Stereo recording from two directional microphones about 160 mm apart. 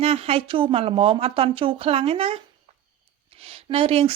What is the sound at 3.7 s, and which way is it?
Speech, 35° right (ahead or behind).